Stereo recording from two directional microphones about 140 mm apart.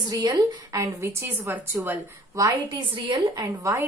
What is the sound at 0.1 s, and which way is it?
A woman's voice, 30° right (ahead or behind).